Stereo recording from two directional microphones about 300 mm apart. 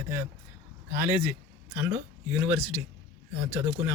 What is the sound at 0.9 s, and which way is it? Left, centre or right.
Speech, centre.